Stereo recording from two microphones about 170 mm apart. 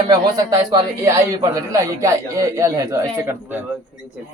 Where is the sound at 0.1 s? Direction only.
20° right (ahead or behind).